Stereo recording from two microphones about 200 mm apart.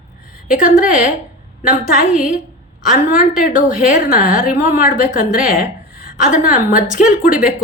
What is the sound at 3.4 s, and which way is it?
A woman's voice, 45° left (ahead or behind).